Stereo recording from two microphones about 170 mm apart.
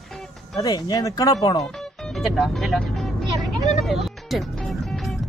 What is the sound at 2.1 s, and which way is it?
Vehicle, centre (ahead or behind).